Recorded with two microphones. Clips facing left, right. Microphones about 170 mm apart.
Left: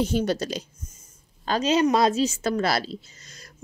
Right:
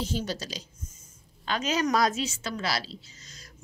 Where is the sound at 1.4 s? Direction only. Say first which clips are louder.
Left 6 dB; 40° left (ahead or behind).